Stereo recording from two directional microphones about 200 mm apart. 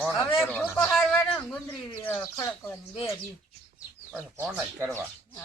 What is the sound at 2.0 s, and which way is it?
Speech, 10° left (ahead or behind).